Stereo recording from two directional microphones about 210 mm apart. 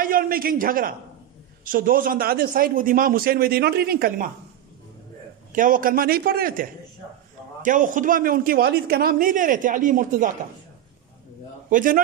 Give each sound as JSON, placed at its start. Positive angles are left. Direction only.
{"t": 0.0, "sound": "a man's voice", "side_deg": -45}
{"t": 5.5, "sound": "a man's voice", "side_deg": -40}
{"t": 11.7, "sound": "a man's voice", "side_deg": -40}